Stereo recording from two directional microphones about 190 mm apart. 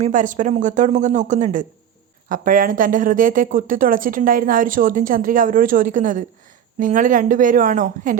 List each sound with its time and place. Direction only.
0.0 s speech: 45° right (ahead or behind)